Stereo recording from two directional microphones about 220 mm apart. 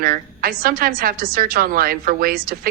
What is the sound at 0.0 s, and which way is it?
A woman's voice, 40° right (ahead or behind).